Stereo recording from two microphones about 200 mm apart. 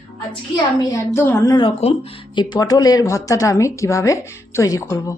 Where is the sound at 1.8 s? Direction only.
30° left (ahead or behind).